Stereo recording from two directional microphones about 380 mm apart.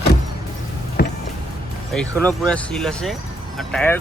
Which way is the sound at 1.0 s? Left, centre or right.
Left.